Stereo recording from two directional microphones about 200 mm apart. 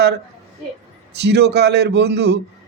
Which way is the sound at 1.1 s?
55° right (ahead or behind).